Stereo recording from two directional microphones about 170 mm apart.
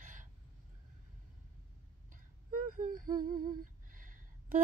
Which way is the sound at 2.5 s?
55° right (ahead or behind).